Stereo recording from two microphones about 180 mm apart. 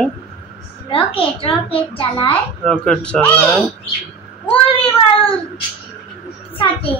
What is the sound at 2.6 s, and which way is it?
Speech, 5° left (ahead or behind).